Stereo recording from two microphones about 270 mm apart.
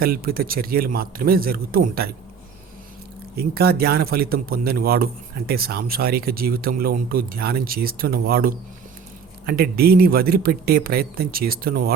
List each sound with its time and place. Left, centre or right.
0.0 s speech: right
3.3 s speech: right